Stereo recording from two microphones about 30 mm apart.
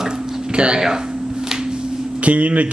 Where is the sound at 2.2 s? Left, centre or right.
Right.